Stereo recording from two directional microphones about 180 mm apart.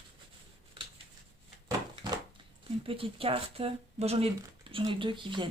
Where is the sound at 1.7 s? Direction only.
20° right (ahead or behind).